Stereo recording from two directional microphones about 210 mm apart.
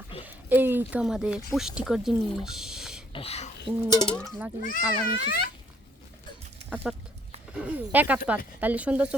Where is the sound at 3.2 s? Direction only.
30° left (ahead or behind).